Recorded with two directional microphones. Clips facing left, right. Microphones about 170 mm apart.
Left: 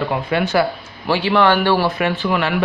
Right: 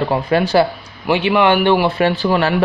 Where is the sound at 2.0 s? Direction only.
30° right (ahead or behind).